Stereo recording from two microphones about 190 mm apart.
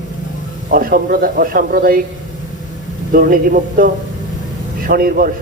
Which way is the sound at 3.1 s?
50° right (ahead or behind).